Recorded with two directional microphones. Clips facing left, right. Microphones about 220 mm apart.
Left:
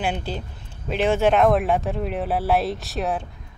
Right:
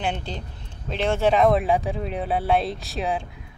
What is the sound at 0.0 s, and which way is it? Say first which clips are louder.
Speech: left 2 dB; 5° left (ahead or behind).